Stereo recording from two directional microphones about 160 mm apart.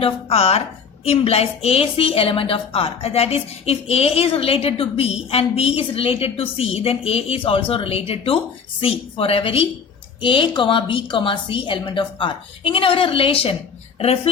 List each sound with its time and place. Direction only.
0.0 s a woman's voice: 40° left (ahead or behind)